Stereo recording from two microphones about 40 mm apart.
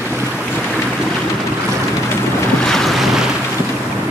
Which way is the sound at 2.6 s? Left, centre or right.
Centre.